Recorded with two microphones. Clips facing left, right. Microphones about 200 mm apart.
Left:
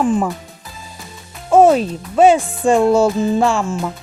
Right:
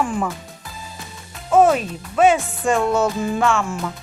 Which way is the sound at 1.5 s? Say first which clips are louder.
Left 4 dB; 30° left (ahead or behind).